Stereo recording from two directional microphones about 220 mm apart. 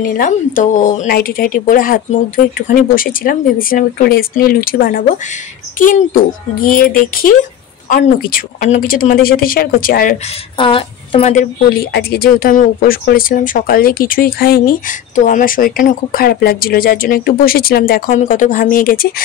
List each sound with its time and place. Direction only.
0.0 s speech: 40° left (ahead or behind)
10.6 s speech: 25° left (ahead or behind)
11.9 s speech: 45° left (ahead or behind)